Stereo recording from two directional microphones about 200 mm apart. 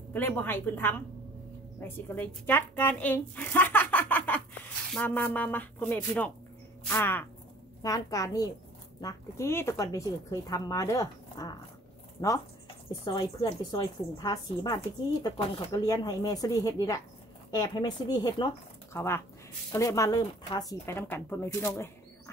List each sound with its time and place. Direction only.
0.4 s speech: 10° left (ahead or behind)
13.0 s a woman's voice: 20° left (ahead or behind)